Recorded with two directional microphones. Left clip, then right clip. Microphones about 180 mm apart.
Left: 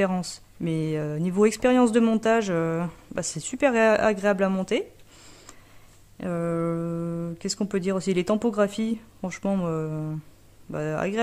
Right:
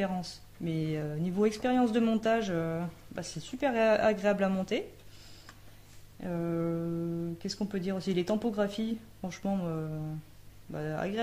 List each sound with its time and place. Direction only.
0.0 s speech: 55° left (ahead or behind)